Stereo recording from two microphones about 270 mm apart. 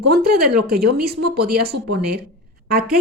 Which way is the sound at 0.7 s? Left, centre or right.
Right.